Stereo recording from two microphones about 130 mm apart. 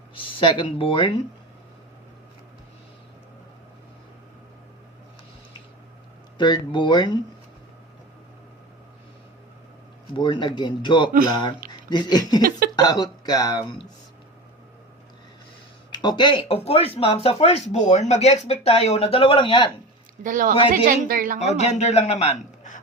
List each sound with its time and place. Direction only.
0.1 s speech: 40° left (ahead or behind)
6.3 s speech: 35° left (ahead or behind)
10.2 s speech: 35° left (ahead or behind)
15.9 s speech: 35° left (ahead or behind)
20.2 s a woman's voice: 90° right
21.3 s a man's voice: 60° left (ahead or behind)